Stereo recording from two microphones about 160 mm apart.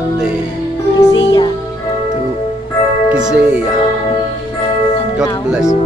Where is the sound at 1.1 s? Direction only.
25° left (ahead or behind).